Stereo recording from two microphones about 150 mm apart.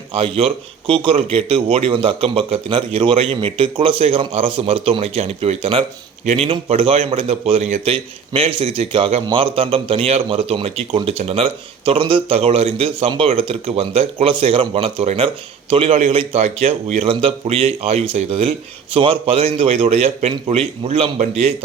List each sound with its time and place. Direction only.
0.1 s a man's voice: 40° right (ahead or behind)